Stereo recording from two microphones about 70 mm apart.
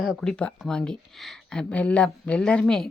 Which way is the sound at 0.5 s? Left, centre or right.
Centre.